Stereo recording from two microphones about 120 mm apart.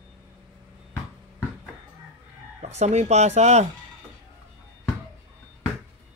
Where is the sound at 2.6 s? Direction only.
65° right (ahead or behind).